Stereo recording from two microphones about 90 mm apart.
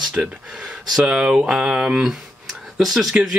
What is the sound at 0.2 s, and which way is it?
Speech, 10° right (ahead or behind).